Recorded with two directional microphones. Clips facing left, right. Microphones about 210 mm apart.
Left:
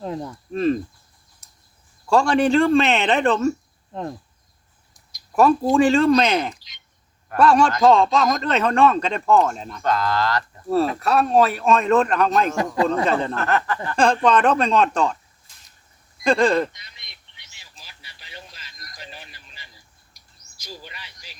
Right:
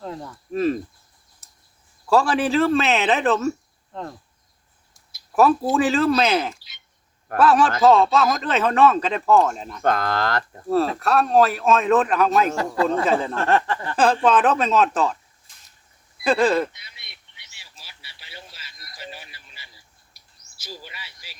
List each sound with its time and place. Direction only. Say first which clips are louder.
0.0 s speech: left 4 dB; 20° left (ahead or behind)
0.5 s a man's voice: left 1 dB; 5° right (ahead or behind)
1.4 s chicken: left 1 dB; 5° right (ahead or behind)
2.0 s a man's voice: left 2 dB; 5° right (ahead or behind)
5.1 s a man's voice: left 1 dB; 5° right (ahead or behind)
9.8 s speech: even; 55° right (ahead or behind)
11.0 s a man's voice: right 1 dB; centre (ahead or behind)
13.3 s a sound: right 2 dB; 30° right (ahead or behind)
13.9 s a man's voice: even; 5° right (ahead or behind)
16.1 s a sound: left 1 dB; 5° right (ahead or behind)
20.1 s bird: left 1 dB; 5° right (ahead or behind)
20.6 s a sound: even; 5° right (ahead or behind)